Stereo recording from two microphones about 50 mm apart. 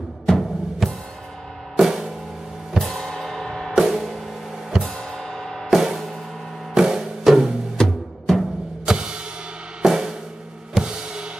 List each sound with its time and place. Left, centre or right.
0.3 s music: centre
2.9 s music: centre
3.7 s music: centre
4.8 s music: centre
5.7 s music: centre
7.7 s music: centre
8.8 s music: centre
10.7 s drum kit: centre